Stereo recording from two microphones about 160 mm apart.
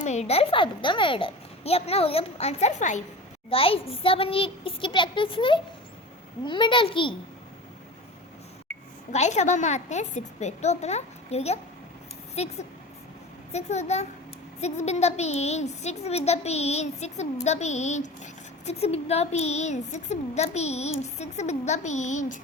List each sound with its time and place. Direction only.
0.0 s a child's voice: 45° left (ahead or behind)
3.5 s a child's voice: 35° left (ahead or behind)
9.1 s a woman's voice: 45° left (ahead or behind)